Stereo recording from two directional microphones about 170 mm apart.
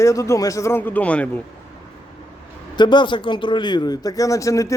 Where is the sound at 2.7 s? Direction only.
25° left (ahead or behind).